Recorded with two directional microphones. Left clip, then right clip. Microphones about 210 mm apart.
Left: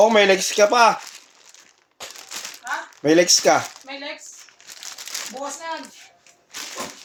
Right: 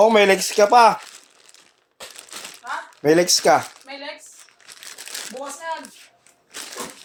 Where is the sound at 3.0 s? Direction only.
20° right (ahead or behind).